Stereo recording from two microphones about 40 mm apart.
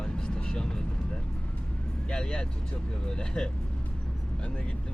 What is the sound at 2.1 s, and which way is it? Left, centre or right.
Speech, left.